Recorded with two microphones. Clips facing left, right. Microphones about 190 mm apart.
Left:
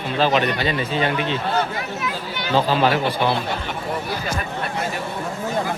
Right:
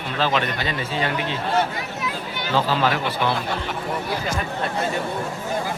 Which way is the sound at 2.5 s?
15° left (ahead or behind).